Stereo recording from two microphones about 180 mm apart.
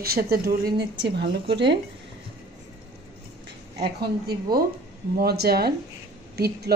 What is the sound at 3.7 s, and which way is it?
A woman's voice, 65° right (ahead or behind).